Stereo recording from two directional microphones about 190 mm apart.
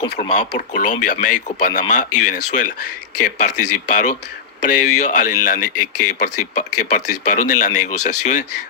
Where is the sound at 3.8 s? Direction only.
40° left (ahead or behind).